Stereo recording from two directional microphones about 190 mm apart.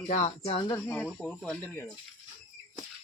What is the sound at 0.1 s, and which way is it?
Speech, 35° left (ahead or behind).